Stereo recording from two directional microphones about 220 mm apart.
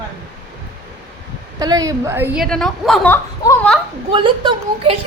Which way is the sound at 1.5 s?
15° right (ahead or behind).